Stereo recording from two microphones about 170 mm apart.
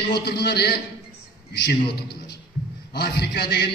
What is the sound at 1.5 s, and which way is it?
Speech, 80° left.